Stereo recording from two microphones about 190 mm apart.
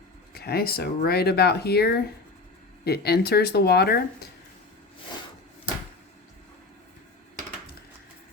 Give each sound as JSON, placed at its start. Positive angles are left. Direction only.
{"t": 0.3, "sound": "speech", "side_deg": 55}